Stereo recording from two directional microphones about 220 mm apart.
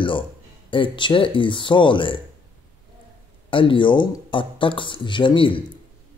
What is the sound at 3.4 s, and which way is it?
Speech, 25° left (ahead or behind).